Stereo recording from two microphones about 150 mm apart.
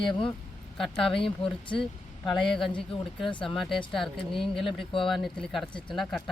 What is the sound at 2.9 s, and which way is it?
Speech, 35° left (ahead or behind).